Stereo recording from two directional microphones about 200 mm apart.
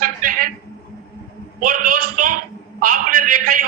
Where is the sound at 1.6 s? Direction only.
40° right (ahead or behind).